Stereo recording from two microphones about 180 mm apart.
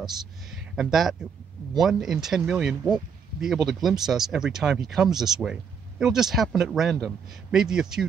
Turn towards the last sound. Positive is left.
turn(degrees=-5)  # may be behind; listen again after turning